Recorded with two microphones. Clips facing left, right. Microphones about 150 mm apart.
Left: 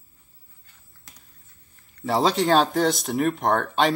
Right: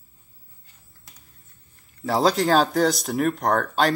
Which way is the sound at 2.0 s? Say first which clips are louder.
Right 1 dB; centre (ahead or behind).